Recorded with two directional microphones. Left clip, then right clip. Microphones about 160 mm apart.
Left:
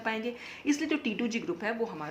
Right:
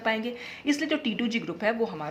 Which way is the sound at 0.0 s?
25° right (ahead or behind).